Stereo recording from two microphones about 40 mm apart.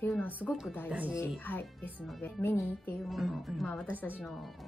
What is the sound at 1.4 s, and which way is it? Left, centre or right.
Speech, left.